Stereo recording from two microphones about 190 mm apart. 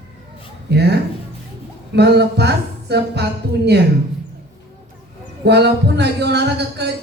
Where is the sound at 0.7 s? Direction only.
60° right (ahead or behind).